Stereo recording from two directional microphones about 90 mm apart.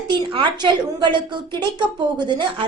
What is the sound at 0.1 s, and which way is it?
A woman's voice, 60° right (ahead or behind).